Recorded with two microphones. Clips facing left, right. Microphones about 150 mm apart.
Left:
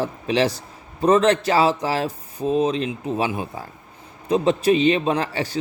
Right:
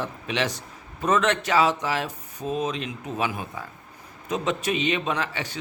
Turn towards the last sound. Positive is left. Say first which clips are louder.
# left 6 dB
turn(degrees=35)  # may be behind; listen again after turning